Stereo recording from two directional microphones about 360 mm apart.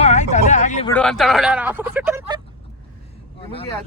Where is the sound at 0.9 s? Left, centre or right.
Centre.